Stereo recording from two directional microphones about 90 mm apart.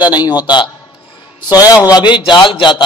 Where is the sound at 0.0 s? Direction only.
50° left (ahead or behind).